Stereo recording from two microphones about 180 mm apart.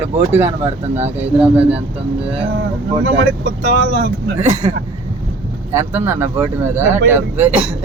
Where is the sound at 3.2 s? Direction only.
65° right (ahead or behind).